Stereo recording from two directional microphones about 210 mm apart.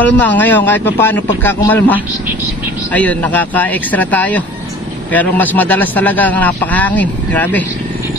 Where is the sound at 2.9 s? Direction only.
5° left (ahead or behind).